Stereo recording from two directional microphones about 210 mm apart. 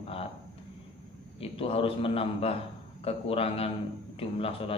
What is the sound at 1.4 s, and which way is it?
Speech, 25° left (ahead or behind).